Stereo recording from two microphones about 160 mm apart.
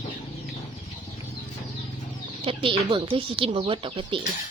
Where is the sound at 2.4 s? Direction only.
35° right (ahead or behind).